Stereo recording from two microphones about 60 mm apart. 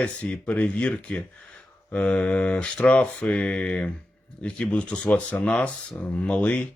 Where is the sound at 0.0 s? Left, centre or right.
Left.